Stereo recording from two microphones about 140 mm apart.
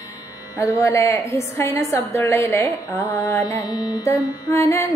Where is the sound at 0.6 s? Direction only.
20° left (ahead or behind).